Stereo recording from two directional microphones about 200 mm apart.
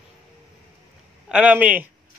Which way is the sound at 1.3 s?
5° right (ahead or behind).